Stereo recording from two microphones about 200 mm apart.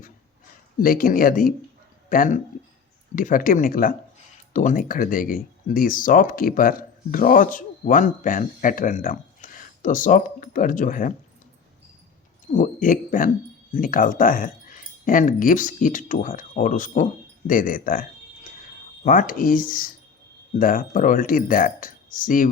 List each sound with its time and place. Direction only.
0.8 s speech: 45° left (ahead or behind)
12.5 s speech: 40° left (ahead or behind)
19.0 s speech: 45° left (ahead or behind)